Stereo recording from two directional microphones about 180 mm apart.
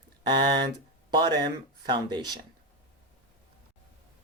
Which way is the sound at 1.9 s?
25° right (ahead or behind).